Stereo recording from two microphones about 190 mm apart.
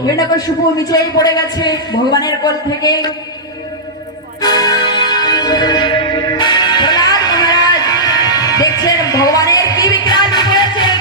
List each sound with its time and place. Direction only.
0.0 s a man's voice: 20° left (ahead or behind)
4.4 s music: 20° left (ahead or behind)